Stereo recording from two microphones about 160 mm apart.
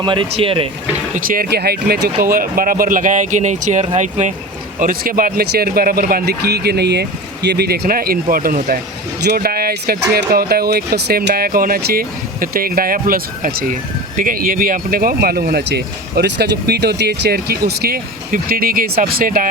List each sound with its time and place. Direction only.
0.0 s speech: 30° right (ahead or behind)
1.1 s speech: 65° right (ahead or behind)
2.2 s speech: 65° right (ahead or behind)
4.8 s speech: 60° right (ahead or behind)
9.2 s speech: 75° right (ahead or behind)